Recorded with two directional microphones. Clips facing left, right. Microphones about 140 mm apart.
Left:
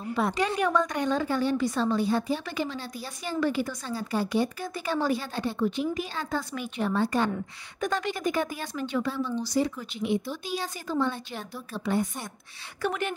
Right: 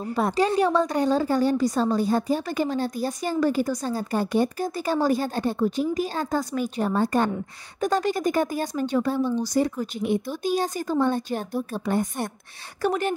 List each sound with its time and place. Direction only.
0.0 s a woman's voice: 40° right (ahead or behind)